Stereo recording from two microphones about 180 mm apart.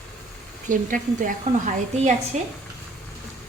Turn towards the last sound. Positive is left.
turn(degrees=-40)  # may be behind; listen again after turning